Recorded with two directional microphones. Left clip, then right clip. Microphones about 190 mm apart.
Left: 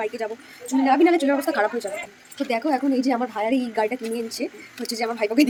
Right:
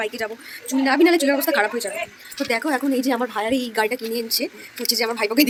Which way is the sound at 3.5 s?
5° left (ahead or behind).